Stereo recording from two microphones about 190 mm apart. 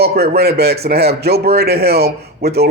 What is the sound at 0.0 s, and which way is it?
A man's voice, 55° right (ahead or behind).